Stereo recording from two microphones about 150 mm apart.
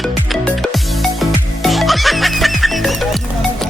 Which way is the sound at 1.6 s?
Centre (ahead or behind).